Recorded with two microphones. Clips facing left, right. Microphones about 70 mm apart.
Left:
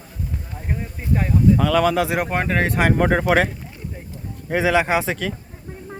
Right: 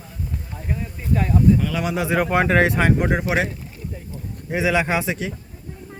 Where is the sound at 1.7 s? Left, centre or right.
Left.